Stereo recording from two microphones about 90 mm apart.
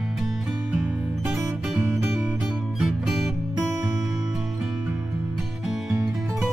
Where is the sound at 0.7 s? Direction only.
10° right (ahead or behind).